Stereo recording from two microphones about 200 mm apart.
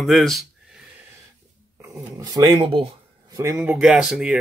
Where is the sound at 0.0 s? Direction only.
Centre (ahead or behind).